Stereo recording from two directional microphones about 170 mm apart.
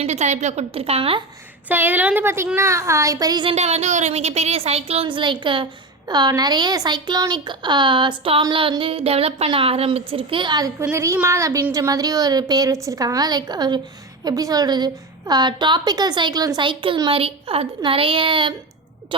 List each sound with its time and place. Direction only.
0.0 s a woman's voice: 40° right (ahead or behind)
1.6 s a woman's voice: 10° right (ahead or behind)
3.5 s a woman's voice: 40° right (ahead or behind)